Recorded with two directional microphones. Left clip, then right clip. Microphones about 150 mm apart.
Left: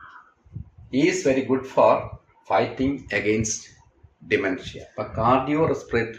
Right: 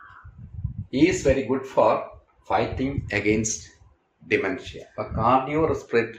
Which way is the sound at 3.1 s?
20° right (ahead or behind).